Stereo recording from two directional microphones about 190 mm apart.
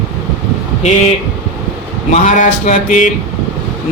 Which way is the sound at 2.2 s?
40° left (ahead or behind).